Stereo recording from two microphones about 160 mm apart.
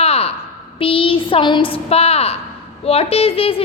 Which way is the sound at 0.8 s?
35° left (ahead or behind).